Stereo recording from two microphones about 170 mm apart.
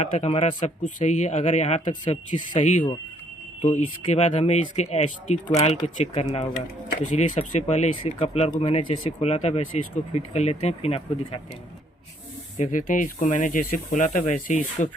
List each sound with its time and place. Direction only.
0.0 s speech: 40° left (ahead or behind)
12.5 s speech: 50° left (ahead or behind)